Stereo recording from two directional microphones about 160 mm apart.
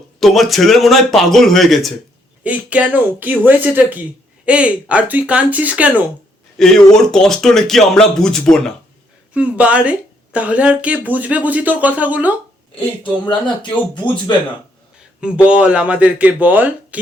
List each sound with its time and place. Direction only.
0.2 s speech: centre (ahead or behind)
6.6 s speech: 5° left (ahead or behind)
9.3 s speech: 10° right (ahead or behind)
13.0 s speech: 30° left (ahead or behind)
15.4 s speech: 5° right (ahead or behind)